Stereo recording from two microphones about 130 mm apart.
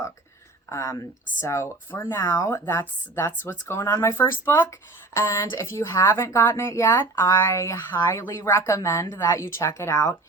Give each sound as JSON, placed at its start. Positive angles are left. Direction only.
{"t": 0.7, "sound": "speech", "side_deg": 25}